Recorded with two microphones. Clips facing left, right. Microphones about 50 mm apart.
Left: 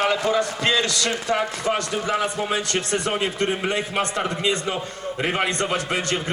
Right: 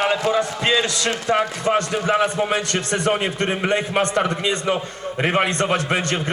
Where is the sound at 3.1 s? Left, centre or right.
Right.